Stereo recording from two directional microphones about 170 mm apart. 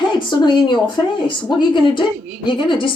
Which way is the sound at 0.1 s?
25° left (ahead or behind).